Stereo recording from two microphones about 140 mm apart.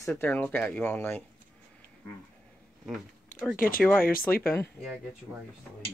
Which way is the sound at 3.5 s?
90° left.